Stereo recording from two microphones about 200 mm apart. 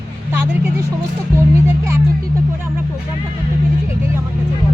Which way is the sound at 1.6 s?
15° right (ahead or behind).